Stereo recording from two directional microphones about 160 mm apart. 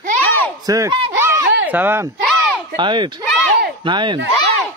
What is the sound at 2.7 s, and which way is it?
Speech, 30° right (ahead or behind).